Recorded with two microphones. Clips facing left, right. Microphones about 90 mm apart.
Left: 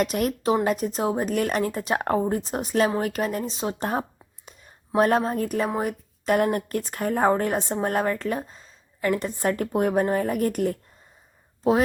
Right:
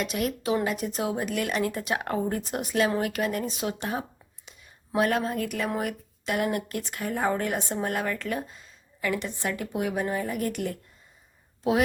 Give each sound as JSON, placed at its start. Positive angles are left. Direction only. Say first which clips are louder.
{"t": 0.0, "sound": "a woman's voice", "louder": "left 5 dB", "side_deg": 45}
{"t": 6.2, "sound": "a woman's voice", "louder": "left 5 dB", "side_deg": 45}